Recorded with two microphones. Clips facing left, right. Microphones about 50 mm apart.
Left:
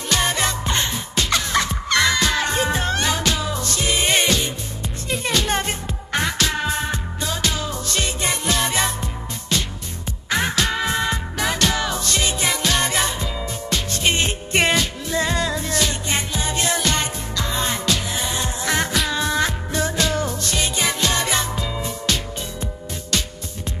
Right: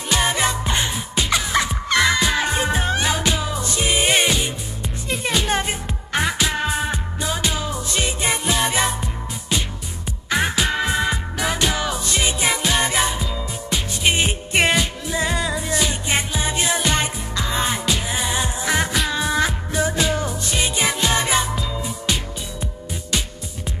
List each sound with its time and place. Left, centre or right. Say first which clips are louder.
0.1 s music: right 1 dB; centre